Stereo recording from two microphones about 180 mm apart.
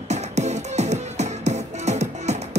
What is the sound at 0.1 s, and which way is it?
Music, 40° right (ahead or behind).